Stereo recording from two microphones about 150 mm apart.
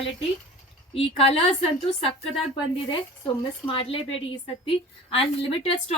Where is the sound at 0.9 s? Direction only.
40° left (ahead or behind).